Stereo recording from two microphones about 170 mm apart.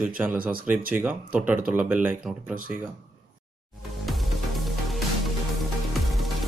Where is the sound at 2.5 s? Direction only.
50° right (ahead or behind).